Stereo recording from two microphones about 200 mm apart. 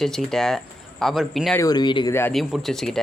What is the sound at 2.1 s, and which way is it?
Speech, 10° left (ahead or behind).